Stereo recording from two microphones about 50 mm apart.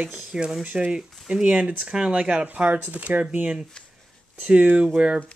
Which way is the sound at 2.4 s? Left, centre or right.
Right.